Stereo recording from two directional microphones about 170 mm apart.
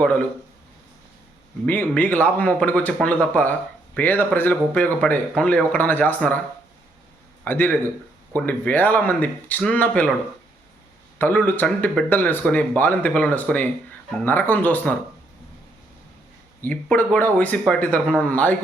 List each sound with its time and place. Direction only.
1.6 s speech: 10° left (ahead or behind)
7.4 s speech: 10° left (ahead or behind)
11.2 s speech: 10° left (ahead or behind)
16.6 s speech: 10° left (ahead or behind)